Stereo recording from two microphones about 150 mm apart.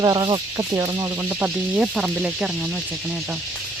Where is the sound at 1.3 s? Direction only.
10° right (ahead or behind).